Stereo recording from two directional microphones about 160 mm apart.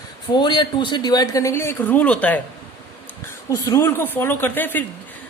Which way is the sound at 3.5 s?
20° left (ahead or behind).